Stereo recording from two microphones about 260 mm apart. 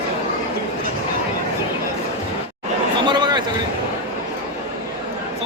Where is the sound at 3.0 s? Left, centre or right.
Centre.